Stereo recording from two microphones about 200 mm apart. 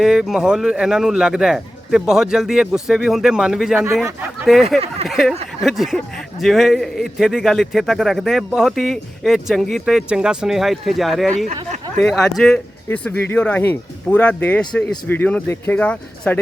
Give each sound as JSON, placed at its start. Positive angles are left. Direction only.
{"t": 0.0, "sound": "speech", "side_deg": 0}
{"t": 11.4, "sound": "a sound", "side_deg": -35}
{"t": 12.4, "sound": "speech", "side_deg": 5}